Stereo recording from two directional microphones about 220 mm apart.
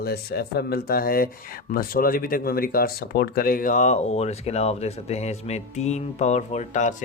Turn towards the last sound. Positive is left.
turn(degrees=35)  # may be behind; listen again after turning